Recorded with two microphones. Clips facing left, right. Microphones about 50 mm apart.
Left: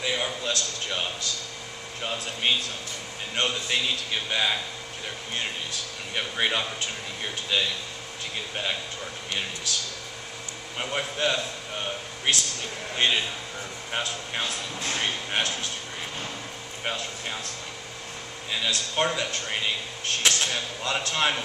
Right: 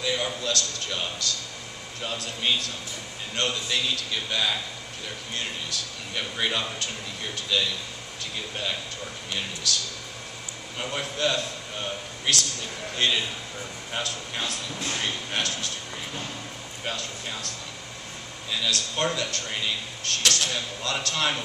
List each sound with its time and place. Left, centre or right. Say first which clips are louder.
0.0 s a sound: even; centre
1.2 s speech: right 1 dB; left
6.1 s speech: left 1 dB; centre
10.8 s speech: even; centre
16.8 s speech: left 1 dB; left
18.5 s speech: even; left